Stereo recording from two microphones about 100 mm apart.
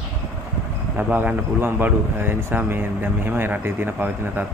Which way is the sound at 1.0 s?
15° right (ahead or behind).